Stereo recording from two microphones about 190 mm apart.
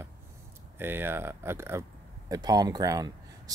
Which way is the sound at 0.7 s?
10° right (ahead or behind).